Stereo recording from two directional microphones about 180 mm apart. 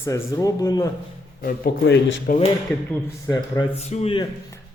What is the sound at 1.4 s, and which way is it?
A man's voice, 55° left (ahead or behind).